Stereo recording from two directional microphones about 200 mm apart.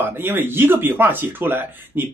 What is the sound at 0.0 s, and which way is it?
Speech, 10° right (ahead or behind).